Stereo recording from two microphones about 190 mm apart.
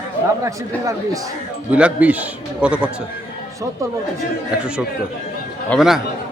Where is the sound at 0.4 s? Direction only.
15° right (ahead or behind).